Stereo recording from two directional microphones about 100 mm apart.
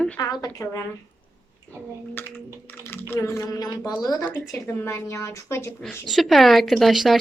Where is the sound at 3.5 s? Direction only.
40° left (ahead or behind).